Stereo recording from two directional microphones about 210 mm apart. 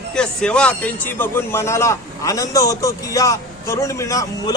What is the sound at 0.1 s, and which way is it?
A man's voice, 5° left (ahead or behind).